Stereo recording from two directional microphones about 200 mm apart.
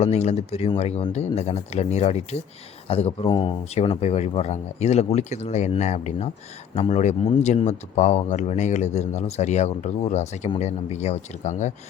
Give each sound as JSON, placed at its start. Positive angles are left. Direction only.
{"t": 0.0, "sound": "speech", "side_deg": 30}